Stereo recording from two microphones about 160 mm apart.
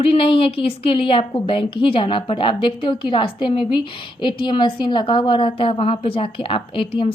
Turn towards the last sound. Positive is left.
turn(degrees=30)  # may be behind; listen again after turning